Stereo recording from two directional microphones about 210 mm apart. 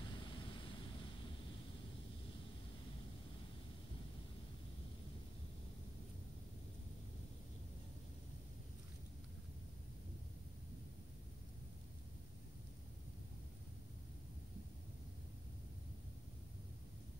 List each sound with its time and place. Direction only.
0.0 s vehicle: 25° left (ahead or behind)